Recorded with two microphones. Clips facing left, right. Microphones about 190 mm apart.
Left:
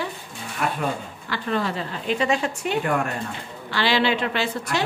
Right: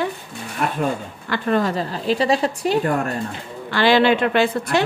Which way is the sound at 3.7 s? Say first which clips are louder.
Right 6 dB; 50° right (ahead or behind).